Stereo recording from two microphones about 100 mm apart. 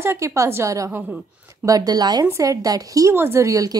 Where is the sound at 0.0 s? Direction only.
25° right (ahead or behind).